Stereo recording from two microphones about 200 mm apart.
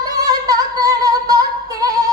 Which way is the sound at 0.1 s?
20° right (ahead or behind).